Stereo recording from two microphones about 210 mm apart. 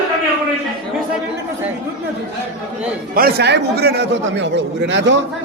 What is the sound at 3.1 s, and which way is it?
A man's voice, 50° right (ahead or behind).